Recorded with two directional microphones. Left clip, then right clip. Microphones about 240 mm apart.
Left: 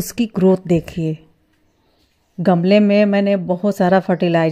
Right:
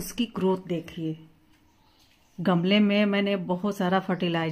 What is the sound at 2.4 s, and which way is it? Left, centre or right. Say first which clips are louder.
Speech: left 10 dB; left.